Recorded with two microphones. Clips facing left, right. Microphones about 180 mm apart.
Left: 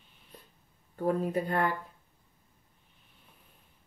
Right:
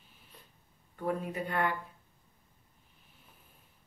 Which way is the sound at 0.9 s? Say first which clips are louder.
Left 5 dB; 40° left (ahead or behind).